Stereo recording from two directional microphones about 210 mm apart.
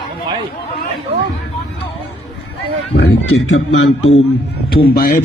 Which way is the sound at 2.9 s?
55° left (ahead or behind).